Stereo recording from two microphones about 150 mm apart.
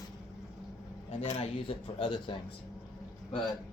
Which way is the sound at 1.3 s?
40° left (ahead or behind).